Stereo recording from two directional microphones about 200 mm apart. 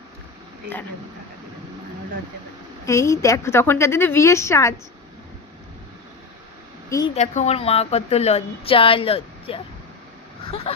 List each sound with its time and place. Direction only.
2.8 s a woman's voice: 15° left (ahead or behind)
7.1 s a woman's voice: 35° left (ahead or behind)